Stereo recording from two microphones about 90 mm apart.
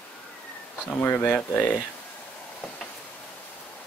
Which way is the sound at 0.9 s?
20° left (ahead or behind).